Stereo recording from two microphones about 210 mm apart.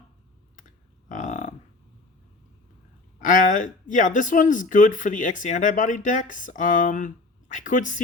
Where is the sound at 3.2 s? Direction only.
40° left (ahead or behind).